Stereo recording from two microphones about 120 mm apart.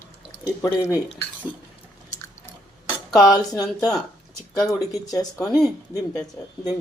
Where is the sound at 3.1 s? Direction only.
30° left (ahead or behind).